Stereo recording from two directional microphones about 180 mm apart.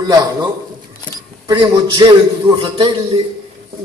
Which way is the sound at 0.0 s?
20° right (ahead or behind).